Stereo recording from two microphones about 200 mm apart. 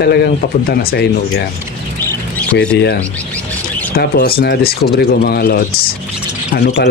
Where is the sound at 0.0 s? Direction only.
55° left (ahead or behind).